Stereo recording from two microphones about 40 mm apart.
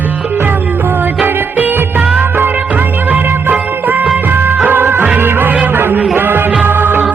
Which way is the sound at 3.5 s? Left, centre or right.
Right.